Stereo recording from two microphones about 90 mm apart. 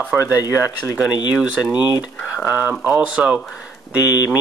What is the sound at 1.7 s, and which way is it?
Speech, 50° left (ahead or behind).